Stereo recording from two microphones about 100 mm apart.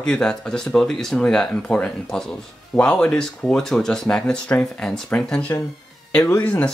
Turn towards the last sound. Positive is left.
turn(degrees=25)  # may be behind; listen again after turning